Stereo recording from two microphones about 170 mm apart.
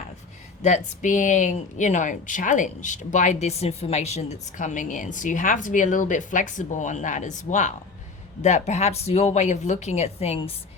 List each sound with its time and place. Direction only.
0.6 s speech: 45° left (ahead or behind)